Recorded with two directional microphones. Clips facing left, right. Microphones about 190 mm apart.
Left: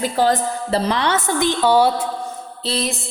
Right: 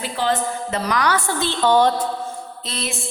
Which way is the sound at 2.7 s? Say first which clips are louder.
Left 7 dB; 35° left (ahead or behind).